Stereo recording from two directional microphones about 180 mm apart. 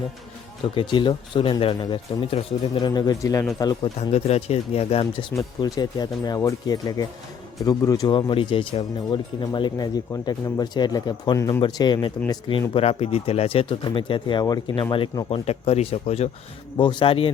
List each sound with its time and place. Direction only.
0.8 s speech: 25° left (ahead or behind)
4.1 s speech: 35° left (ahead or behind)